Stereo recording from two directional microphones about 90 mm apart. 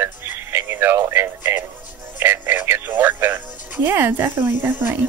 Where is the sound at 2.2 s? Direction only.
20° right (ahead or behind).